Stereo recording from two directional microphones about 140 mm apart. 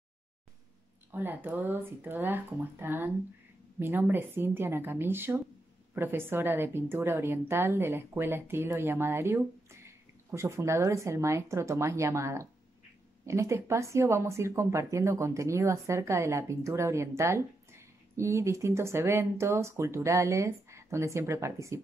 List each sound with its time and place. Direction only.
1.1 s a woman's voice: 15° right (ahead or behind)